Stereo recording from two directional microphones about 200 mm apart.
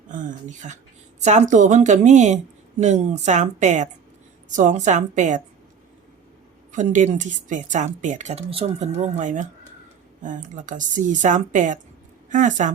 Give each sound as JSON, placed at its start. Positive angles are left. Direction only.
{"t": 0.1, "sound": "a woman's voice", "side_deg": -40}
{"t": 6.7, "sound": "a woman's voice", "side_deg": -40}